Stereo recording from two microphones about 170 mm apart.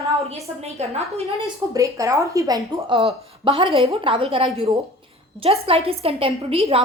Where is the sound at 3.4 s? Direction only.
35° right (ahead or behind).